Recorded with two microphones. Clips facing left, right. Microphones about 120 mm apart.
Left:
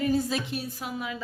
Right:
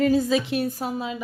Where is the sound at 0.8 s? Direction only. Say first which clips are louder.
Right 6 dB; 35° right (ahead or behind).